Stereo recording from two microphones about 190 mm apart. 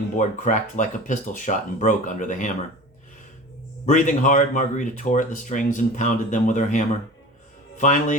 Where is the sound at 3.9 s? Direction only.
40° left (ahead or behind).